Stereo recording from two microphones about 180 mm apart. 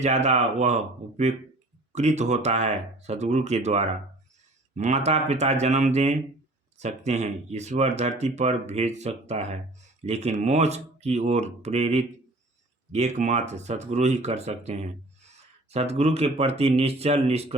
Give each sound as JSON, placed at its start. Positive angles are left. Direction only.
{"t": 0.0, "sound": "speech", "side_deg": -40}